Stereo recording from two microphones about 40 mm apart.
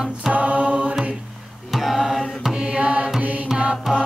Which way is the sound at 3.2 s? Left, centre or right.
Right.